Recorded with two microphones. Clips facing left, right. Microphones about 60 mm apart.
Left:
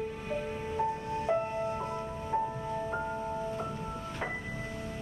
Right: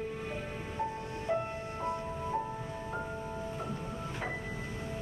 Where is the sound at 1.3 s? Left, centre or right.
Centre.